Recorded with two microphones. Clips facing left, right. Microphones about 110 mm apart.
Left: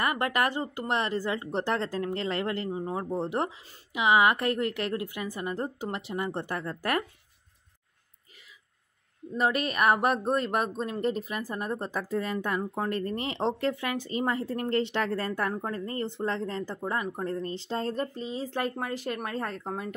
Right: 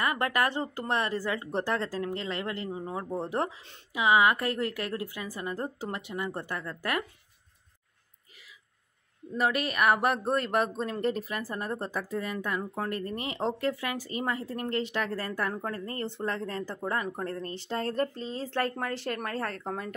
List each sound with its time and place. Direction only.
0.0 s speech: 25° left (ahead or behind)
2.0 s speech: 35° left (ahead or behind)
2.9 s speech: 20° left (ahead or behind)
9.4 s speech: 25° left (ahead or behind)